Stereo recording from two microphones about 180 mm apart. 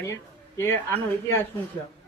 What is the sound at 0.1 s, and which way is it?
Speech, 15° left (ahead or behind).